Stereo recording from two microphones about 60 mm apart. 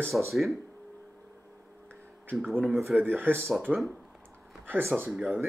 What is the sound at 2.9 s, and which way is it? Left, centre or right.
Speech, right.